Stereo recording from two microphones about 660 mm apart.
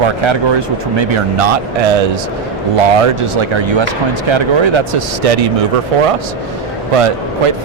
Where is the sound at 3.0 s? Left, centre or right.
Right.